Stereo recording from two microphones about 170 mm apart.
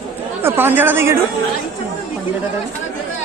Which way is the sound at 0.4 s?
10° right (ahead or behind).